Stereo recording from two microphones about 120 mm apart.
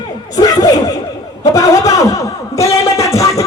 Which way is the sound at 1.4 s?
30° left (ahead or behind).